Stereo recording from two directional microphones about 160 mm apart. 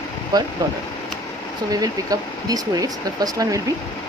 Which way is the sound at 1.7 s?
25° right (ahead or behind).